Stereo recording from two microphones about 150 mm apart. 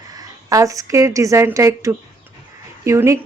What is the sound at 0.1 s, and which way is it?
A woman's voice, 25° right (ahead or behind).